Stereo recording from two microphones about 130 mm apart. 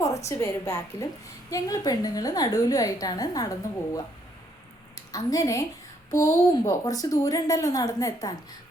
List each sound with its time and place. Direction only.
0.0 s a woman's voice: 25° left (ahead or behind)
5.1 s a woman's voice: 25° left (ahead or behind)